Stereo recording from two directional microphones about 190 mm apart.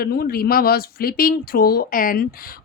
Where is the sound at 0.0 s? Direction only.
55° left (ahead or behind).